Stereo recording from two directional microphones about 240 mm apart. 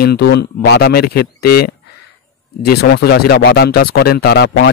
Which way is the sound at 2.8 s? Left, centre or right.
Left.